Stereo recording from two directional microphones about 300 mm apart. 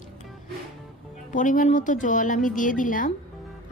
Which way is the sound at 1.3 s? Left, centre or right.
Left.